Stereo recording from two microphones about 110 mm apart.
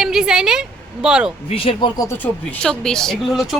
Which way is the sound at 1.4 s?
60° left (ahead or behind).